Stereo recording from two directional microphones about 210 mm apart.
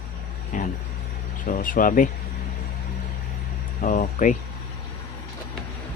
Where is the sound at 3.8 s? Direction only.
40° left (ahead or behind).